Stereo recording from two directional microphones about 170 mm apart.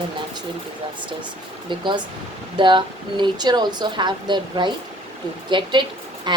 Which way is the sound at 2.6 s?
30° right (ahead or behind).